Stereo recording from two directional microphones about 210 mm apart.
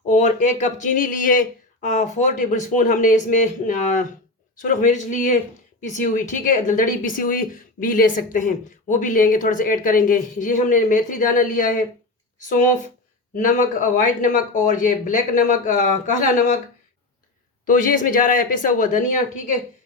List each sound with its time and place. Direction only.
0.1 s speech: 35° left (ahead or behind)
17.7 s speech: 40° left (ahead or behind)